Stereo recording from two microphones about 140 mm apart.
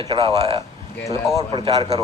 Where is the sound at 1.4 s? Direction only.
30° right (ahead or behind).